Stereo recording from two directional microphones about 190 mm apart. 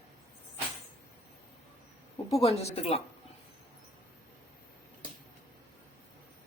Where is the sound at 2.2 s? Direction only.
30° left (ahead or behind).